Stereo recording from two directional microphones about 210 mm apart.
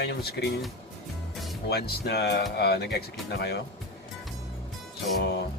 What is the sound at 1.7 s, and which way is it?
Speech, 50° left (ahead or behind).